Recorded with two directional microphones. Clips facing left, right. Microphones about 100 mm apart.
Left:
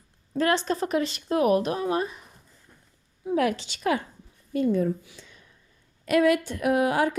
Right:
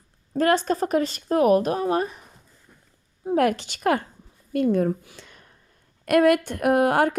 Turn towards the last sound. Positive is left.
turn(degrees=-55)  # may be behind; listen again after turning